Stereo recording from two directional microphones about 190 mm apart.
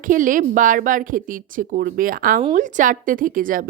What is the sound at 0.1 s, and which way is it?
A woman's voice, 45° right (ahead or behind).